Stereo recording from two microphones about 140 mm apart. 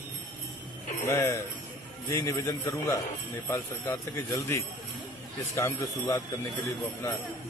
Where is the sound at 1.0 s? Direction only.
20° left (ahead or behind).